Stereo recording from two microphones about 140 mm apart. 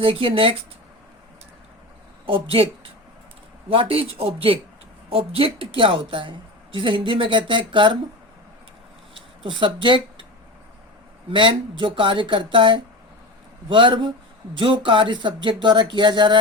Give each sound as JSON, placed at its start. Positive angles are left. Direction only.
{"t": 0.0, "sound": "a woman's voice", "side_deg": -40}
{"t": 2.2, "sound": "a woman's voice", "side_deg": -40}
{"t": 3.7, "sound": "a woman's voice", "side_deg": -40}
{"t": 9.4, "sound": "speech", "side_deg": -35}
{"t": 11.3, "sound": "a woman's voice", "side_deg": -40}